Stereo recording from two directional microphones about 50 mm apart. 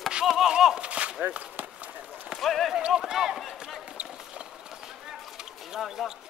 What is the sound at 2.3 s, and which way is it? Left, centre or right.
Speech, centre.